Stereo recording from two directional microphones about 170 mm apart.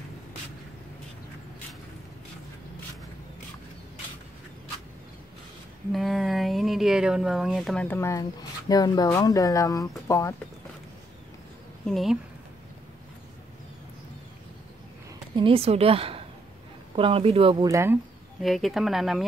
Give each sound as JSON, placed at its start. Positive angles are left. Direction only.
{"t": 5.9, "sound": "speech", "side_deg": 0}
{"t": 11.8, "sound": "speech", "side_deg": 0}
{"t": 15.3, "sound": "a woman's voice", "side_deg": -35}
{"t": 17.6, "sound": "speech", "side_deg": -20}
{"t": 18.4, "sound": "speech", "side_deg": 0}